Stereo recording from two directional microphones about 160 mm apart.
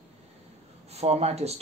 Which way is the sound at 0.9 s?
40° right (ahead or behind).